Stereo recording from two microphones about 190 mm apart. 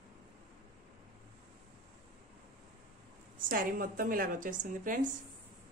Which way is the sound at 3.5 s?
45° right (ahead or behind).